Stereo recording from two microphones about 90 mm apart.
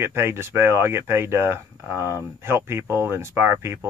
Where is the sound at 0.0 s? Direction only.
30° right (ahead or behind).